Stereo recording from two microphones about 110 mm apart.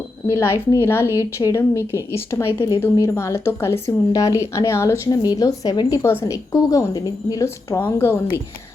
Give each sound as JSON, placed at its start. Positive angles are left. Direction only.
{"t": 0.3, "sound": "speech", "side_deg": 25}